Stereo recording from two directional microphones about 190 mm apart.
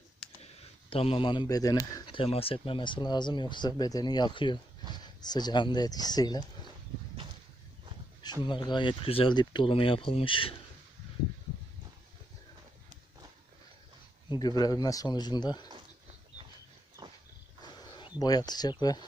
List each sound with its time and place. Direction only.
0.6 s speech: 30° left (ahead or behind)
8.4 s speech: 25° left (ahead or behind)
14.3 s speech: 20° left (ahead or behind)
17.0 s horse: 25° right (ahead or behind)
17.6 s a sound: 20° left (ahead or behind)
18.2 s speech: 20° left (ahead or behind)